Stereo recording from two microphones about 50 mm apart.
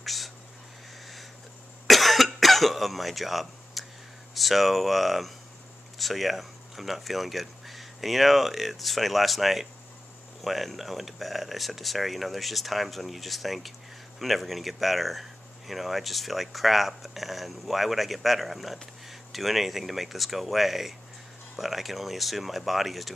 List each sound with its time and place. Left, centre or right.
0.0 s a sound: centre
1.9 s cough: centre
4.3 s speech: centre